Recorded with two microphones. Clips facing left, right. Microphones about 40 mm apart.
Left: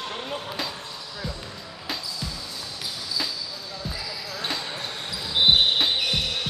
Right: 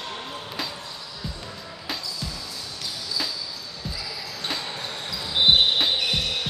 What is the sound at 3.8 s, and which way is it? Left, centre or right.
Basketball bounce, centre.